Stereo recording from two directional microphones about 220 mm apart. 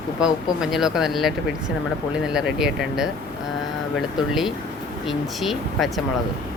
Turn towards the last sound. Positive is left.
turn(degrees=0)  # may be behind; listen again after turning